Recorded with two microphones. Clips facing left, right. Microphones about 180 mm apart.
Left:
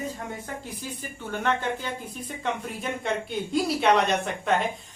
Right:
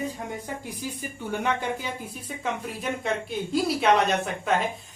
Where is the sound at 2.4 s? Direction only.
Centre (ahead or behind).